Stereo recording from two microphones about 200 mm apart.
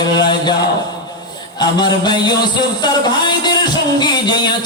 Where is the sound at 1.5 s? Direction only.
20° left (ahead or behind).